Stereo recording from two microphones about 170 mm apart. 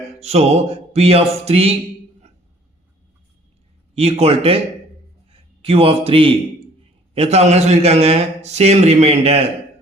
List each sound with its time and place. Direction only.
0.2 s a man's voice: 40° right (ahead or behind)
3.9 s a man's voice: 35° right (ahead or behind)